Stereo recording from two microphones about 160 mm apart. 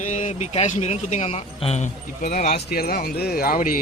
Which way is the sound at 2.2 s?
55° left (ahead or behind).